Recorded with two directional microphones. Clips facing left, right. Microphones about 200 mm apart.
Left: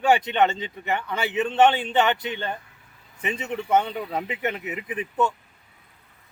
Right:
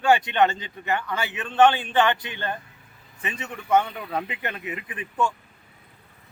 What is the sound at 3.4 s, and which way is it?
Speech, 20° left (ahead or behind).